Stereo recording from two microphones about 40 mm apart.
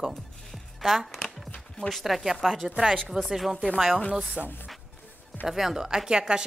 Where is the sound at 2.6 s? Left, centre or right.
Right.